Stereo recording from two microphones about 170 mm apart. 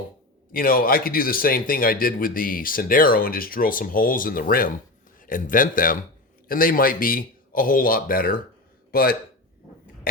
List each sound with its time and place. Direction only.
0.5 s speech: 55° left (ahead or behind)